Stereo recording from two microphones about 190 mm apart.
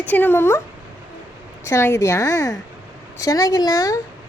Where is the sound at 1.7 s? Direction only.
15° left (ahead or behind).